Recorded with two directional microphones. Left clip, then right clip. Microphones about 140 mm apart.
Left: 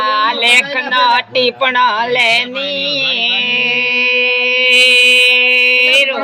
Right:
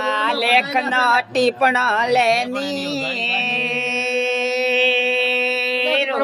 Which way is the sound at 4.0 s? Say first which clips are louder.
Left 8 dB; 15° right (ahead or behind).